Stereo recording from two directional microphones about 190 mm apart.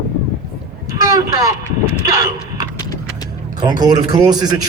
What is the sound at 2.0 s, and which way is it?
Vehicle, 20° right (ahead or behind).